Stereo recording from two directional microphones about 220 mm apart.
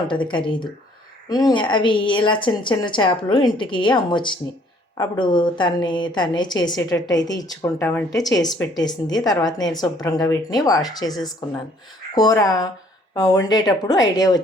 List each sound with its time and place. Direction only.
0.1 s a woman's voice: 20° left (ahead or behind)